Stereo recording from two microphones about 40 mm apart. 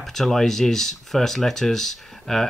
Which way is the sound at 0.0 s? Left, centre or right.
Centre.